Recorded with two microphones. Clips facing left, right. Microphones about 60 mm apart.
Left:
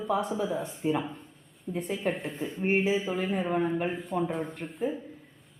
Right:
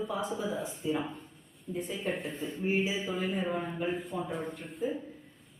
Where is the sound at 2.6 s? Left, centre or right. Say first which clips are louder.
Left 5 dB; left.